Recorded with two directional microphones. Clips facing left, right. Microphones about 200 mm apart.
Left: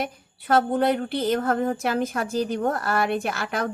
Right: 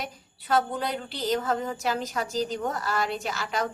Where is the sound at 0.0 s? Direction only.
55° left (ahead or behind).